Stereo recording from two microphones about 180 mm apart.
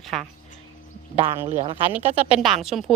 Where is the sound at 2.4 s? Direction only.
Centre (ahead or behind).